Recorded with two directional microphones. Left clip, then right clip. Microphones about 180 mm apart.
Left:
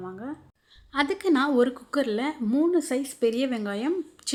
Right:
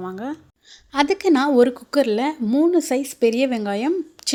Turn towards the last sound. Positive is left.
turn(degrees=-35)  # may be behind; listen again after turning